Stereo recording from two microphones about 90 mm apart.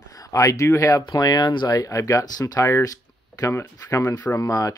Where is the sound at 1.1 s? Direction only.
50° left (ahead or behind).